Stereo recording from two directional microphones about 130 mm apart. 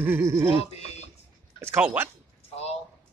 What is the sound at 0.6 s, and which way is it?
Speech, 55° left (ahead or behind).